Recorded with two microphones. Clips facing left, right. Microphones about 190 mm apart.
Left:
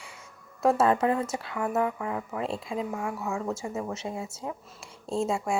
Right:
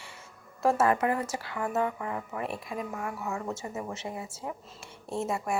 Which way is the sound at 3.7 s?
25° left (ahead or behind).